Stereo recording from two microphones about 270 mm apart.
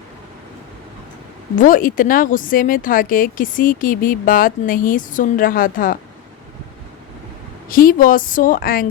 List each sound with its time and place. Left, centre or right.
1.5 s speech: left
7.7 s speech: left